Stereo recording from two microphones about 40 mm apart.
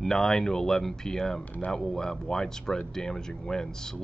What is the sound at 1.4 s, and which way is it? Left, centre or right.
Speech, left.